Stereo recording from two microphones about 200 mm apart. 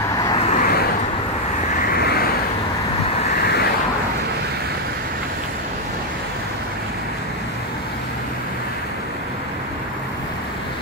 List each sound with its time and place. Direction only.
0.2 s vehicle: 20° left (ahead or behind)
0.5 s vehicle: 45° left (ahead or behind)
3.4 s a sound: 50° left (ahead or behind)